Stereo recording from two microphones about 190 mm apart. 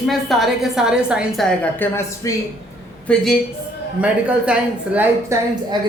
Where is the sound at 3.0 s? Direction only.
Centre (ahead or behind).